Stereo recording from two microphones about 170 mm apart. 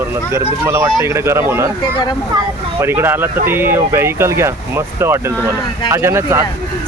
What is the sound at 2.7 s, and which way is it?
Speech, 15° right (ahead or behind).